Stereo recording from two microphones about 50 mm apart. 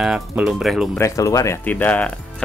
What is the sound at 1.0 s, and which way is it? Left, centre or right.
Speech, left.